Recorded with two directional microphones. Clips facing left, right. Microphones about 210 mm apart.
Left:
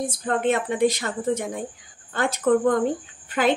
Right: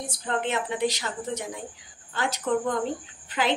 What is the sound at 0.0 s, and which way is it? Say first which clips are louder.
A woman's voice: left 6 dB; 50° left (ahead or behind).